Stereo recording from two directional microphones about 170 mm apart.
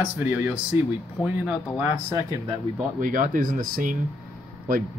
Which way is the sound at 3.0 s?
50° right (ahead or behind).